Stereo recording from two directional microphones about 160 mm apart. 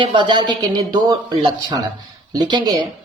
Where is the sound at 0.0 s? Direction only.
30° right (ahead or behind).